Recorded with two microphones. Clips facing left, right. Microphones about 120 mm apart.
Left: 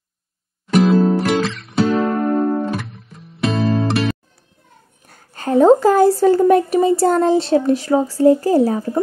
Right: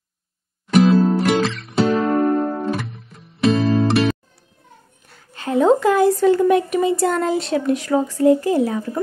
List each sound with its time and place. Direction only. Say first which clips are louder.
0.7 s music: even; centre (ahead or behind)
5.0 s speech: left 3 dB; 45° left (ahead or behind)